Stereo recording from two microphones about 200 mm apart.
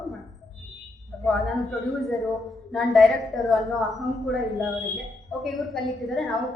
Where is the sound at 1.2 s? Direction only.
Centre (ahead or behind).